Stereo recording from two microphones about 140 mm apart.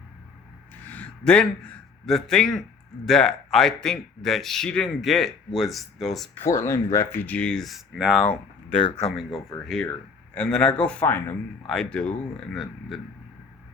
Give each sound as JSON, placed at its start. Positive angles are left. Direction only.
{"t": 0.9, "sound": "a sound", "side_deg": 10}
{"t": 3.1, "sound": "speech", "side_deg": 5}
{"t": 6.3, "sound": "speech", "side_deg": 20}